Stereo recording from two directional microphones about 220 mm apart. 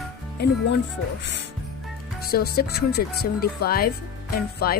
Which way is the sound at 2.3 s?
45° left (ahead or behind).